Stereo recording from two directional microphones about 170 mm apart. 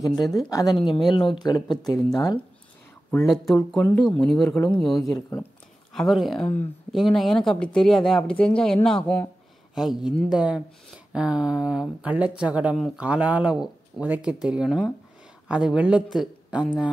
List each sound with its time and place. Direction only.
0.0 s speech: 20° left (ahead or behind)
3.5 s speech: 10° left (ahead or behind)
9.8 s speech: centre (ahead or behind)